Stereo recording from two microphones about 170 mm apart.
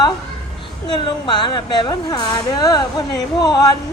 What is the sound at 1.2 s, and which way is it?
Speech, 25° left (ahead or behind).